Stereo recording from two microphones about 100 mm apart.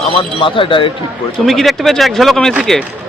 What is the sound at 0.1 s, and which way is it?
Speech, 60° left (ahead or behind).